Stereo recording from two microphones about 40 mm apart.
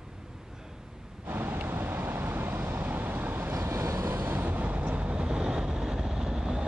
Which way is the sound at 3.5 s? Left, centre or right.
Right.